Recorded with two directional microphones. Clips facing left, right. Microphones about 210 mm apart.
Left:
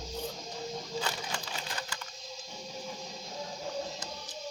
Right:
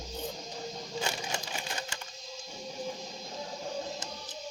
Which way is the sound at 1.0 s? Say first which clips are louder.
Right 2 dB; 25° right (ahead or behind).